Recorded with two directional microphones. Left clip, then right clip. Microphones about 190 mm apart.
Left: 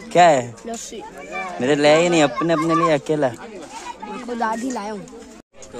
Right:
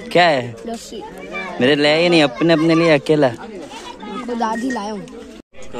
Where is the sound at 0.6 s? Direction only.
20° left (ahead or behind).